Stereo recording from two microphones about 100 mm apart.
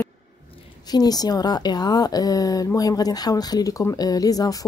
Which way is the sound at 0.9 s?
40° left (ahead or behind).